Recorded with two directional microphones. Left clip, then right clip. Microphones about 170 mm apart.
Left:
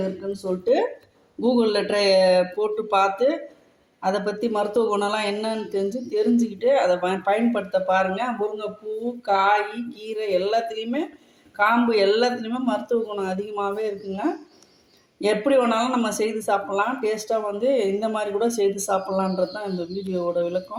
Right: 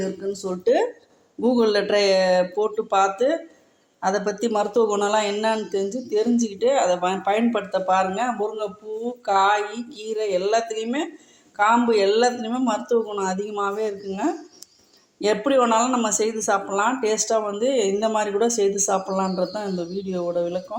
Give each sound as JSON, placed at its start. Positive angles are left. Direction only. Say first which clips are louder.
{"t": 0.4, "sound": "speech", "louder": "right 1 dB", "side_deg": -15}